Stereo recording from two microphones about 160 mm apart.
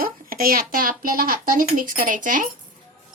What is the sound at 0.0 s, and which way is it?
Speech, 65° right (ahead or behind).